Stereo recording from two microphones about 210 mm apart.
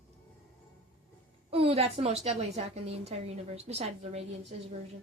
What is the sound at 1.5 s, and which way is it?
A woman's voice, 30° right (ahead or behind).